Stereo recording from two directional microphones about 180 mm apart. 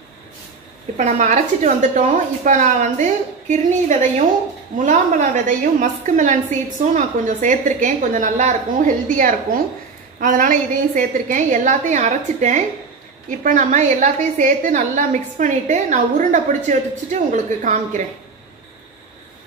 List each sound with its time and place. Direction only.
0.9 s a woman's voice: 45° right (ahead or behind)